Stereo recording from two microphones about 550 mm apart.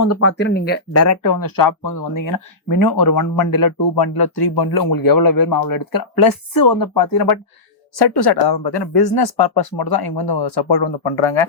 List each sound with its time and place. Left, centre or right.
0.0 s speech: left
1.0 s speech: left